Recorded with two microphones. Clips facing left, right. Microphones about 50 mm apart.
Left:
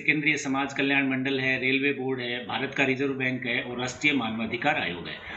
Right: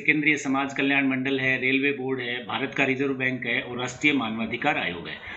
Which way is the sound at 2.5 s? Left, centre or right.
Centre.